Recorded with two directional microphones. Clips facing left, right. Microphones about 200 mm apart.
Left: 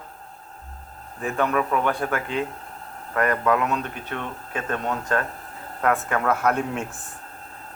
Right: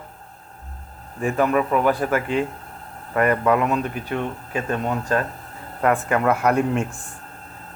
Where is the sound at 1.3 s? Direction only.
10° right (ahead or behind).